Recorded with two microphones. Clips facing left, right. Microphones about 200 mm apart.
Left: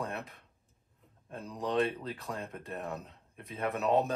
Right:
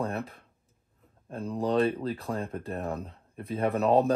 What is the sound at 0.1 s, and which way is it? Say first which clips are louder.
Speech: right 6 dB; 30° right (ahead or behind).